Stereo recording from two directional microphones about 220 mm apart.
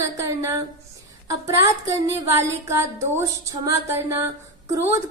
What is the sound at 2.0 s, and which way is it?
A woman's voice, 15° right (ahead or behind).